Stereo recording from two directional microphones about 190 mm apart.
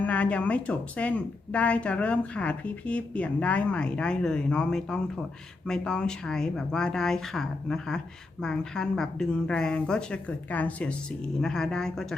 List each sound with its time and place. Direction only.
0.0 s a woman's voice: 5° left (ahead or behind)